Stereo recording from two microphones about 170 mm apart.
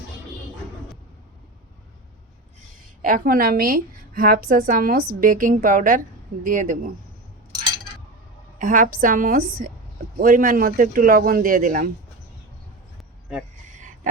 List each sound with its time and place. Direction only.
3.0 s a woman's voice: 55° right (ahead or behind)
8.5 s a woman's voice: 50° right (ahead or behind)